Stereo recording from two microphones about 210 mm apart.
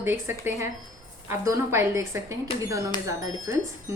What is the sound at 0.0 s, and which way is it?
A woman's voice, 10° right (ahead or behind).